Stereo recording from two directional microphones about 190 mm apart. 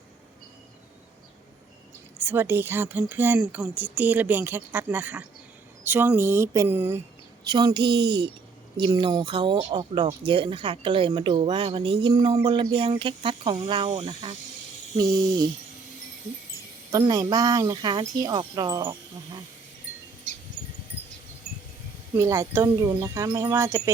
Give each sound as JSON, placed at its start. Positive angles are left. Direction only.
{"t": 2.1, "sound": "speech", "side_deg": -10}
{"t": 7.4, "sound": "speech", "side_deg": -20}
{"t": 16.9, "sound": "speech", "side_deg": -20}
{"t": 22.2, "sound": "speech", "side_deg": -15}